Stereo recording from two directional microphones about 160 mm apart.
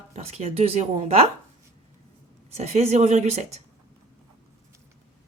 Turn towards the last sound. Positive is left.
turn(degrees=-45)  # may be behind; listen again after turning